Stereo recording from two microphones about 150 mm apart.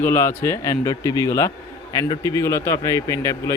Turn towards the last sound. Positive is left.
turn(degrees=20)  # may be behind; listen again after turning